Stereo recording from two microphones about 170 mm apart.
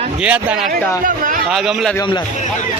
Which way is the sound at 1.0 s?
50° right (ahead or behind).